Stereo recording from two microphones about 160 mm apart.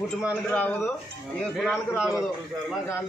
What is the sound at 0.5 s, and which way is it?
Speech, 10° left (ahead or behind).